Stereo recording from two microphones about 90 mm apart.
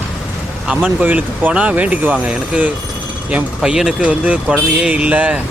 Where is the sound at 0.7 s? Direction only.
15° right (ahead or behind).